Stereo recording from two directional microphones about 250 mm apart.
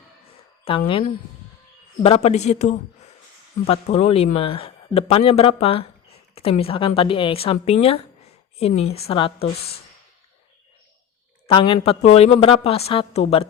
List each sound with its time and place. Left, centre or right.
0.6 s a woman's voice: left
2.0 s speech: left
11.4 s speech: left